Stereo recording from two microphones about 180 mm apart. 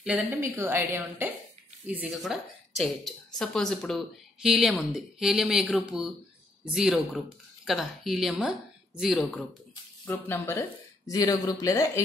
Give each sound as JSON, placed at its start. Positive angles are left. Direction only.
{"t": 0.0, "sound": "a woman's voice", "side_deg": -10}
{"t": 10.0, "sound": "speech", "side_deg": 10}